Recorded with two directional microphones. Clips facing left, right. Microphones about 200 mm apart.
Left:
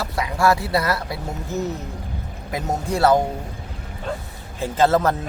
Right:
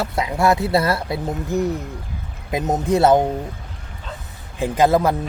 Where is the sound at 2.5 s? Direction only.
20° right (ahead or behind).